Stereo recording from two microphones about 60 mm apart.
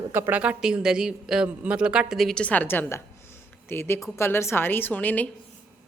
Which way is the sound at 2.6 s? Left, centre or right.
Left.